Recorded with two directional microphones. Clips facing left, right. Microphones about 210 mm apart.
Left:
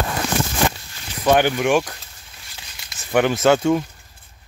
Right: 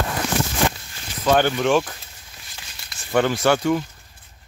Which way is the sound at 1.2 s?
15° left (ahead or behind).